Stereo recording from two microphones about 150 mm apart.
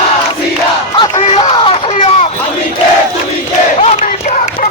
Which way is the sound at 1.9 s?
55° left (ahead or behind).